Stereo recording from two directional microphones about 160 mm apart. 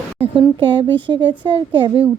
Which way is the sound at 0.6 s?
30° right (ahead or behind).